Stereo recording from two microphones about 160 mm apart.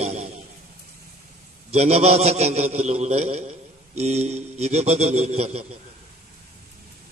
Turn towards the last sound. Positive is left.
turn(degrees=-40)  # may be behind; listen again after turning